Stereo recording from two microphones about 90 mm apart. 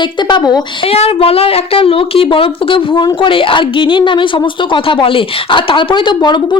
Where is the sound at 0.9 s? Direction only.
90° left.